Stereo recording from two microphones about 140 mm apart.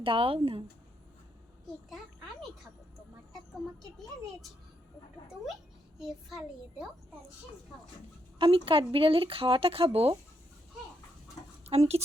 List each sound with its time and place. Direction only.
0.0 s speech: 40° right (ahead or behind)
6.0 s a child's voice: centre (ahead or behind)
8.4 s speech: 40° right (ahead or behind)
11.7 s speech: 50° right (ahead or behind)